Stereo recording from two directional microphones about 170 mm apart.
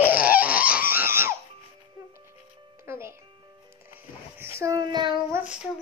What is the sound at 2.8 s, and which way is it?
Music, 15° right (ahead or behind).